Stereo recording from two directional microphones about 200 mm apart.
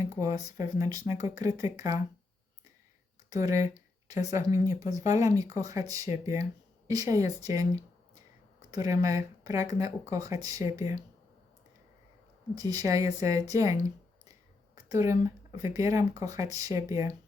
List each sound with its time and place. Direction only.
0.2 s speech: 15° right (ahead or behind)
3.2 s speech: 15° right (ahead or behind)
12.5 s speech: 15° right (ahead or behind)
14.8 s speech: 15° right (ahead or behind)